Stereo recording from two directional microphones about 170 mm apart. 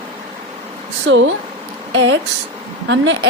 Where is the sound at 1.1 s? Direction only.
90° right.